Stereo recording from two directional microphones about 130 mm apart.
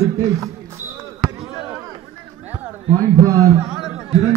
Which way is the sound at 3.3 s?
25° right (ahead or behind).